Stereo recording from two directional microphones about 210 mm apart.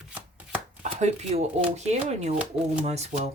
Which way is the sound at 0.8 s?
35° right (ahead or behind).